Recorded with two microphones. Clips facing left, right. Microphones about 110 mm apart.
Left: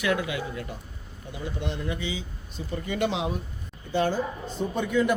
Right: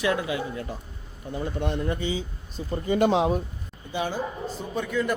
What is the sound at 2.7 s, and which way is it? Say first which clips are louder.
Speech: right 6 dB; 35° right (ahead or behind).